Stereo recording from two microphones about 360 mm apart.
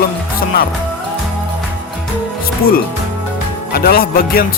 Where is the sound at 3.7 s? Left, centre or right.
Left.